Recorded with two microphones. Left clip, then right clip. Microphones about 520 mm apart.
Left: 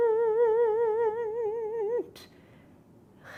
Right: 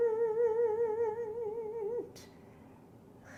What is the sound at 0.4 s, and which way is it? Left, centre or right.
Humming, left.